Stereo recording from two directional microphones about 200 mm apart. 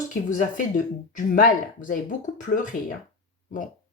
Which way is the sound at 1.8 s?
40° left (ahead or behind).